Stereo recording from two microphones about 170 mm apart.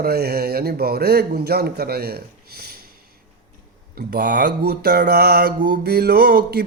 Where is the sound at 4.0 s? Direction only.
70° right (ahead or behind).